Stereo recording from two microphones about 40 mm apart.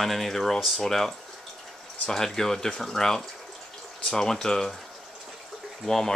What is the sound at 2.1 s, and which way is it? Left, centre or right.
Speech, centre.